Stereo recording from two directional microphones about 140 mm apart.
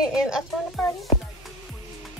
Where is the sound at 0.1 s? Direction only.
5° right (ahead or behind).